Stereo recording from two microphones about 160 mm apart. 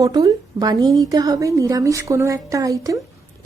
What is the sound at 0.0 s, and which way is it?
A woman's voice, 25° right (ahead or behind).